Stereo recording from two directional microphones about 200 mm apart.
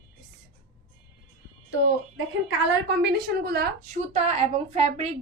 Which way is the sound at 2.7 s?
60° right (ahead or behind).